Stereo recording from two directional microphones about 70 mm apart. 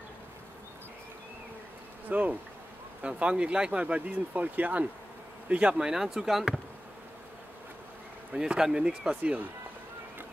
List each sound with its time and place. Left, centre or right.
2.0 s bee: right
3.0 s speech: centre
8.4 s speech: centre